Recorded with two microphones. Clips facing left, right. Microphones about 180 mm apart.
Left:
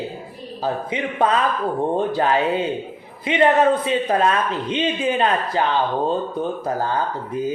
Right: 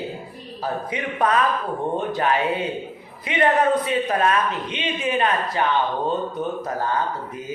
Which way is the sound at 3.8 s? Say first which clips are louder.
Left 2 dB; 30° left (ahead or behind).